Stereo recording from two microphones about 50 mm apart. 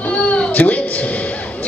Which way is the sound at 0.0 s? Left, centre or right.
Left.